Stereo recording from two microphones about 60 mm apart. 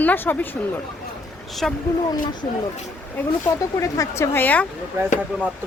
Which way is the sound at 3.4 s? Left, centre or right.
Left.